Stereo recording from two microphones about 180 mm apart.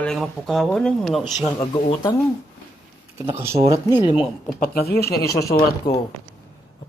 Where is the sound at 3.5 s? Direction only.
35° right (ahead or behind).